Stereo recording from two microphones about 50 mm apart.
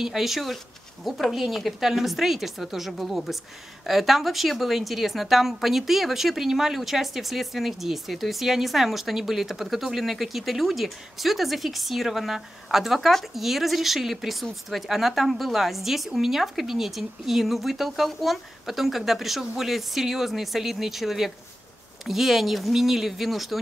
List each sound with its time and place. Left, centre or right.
0.0 s speech: centre